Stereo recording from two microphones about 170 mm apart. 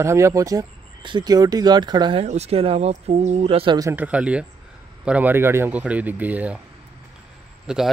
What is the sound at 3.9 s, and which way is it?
Speech, 10° right (ahead or behind).